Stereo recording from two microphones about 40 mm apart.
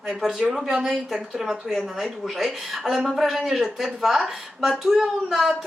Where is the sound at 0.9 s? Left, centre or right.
Centre.